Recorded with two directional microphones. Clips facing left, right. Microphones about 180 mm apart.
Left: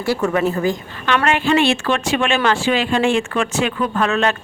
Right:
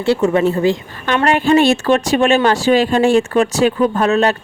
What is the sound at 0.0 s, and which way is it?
A woman's voice, 25° right (ahead or behind).